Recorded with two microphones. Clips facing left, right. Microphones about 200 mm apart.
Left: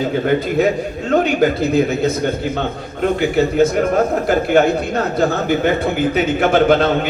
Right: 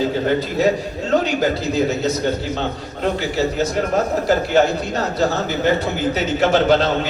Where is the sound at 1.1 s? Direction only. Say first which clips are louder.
Left 3 dB; 55° left (ahead or behind).